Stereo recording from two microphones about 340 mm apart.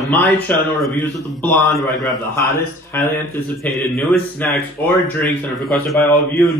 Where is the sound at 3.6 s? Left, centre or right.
Centre.